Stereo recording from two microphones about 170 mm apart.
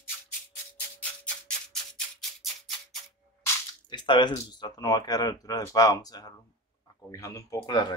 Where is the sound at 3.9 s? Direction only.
25° left (ahead or behind).